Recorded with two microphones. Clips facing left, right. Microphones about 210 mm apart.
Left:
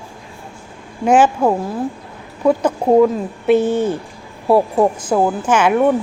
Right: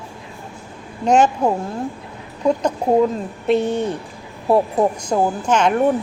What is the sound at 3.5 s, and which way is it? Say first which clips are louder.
Speech: left 4 dB; centre (ahead or behind).